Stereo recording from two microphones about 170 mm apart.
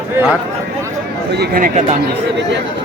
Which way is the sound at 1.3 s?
65° right (ahead or behind).